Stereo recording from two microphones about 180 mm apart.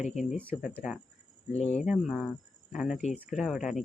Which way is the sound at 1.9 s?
Centre (ahead or behind).